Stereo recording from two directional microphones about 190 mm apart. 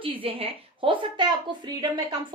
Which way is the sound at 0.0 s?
30° right (ahead or behind).